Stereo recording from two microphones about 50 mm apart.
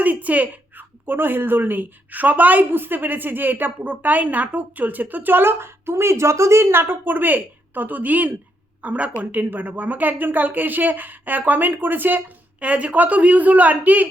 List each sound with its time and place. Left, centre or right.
0.0 s a woman's voice: right